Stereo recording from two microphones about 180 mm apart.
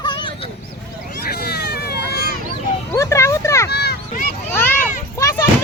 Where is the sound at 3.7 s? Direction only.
65° left (ahead or behind).